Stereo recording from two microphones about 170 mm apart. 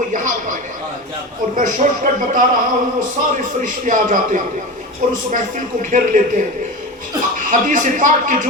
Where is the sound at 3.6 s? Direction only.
50° right (ahead or behind).